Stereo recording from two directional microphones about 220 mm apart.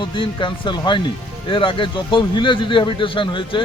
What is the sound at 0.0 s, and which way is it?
A man's voice, 20° left (ahead or behind).